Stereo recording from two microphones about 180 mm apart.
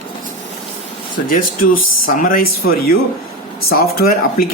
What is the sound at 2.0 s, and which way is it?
Speech, 50° left (ahead or behind).